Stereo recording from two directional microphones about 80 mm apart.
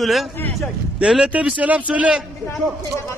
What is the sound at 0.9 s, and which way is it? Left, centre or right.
Speech, centre.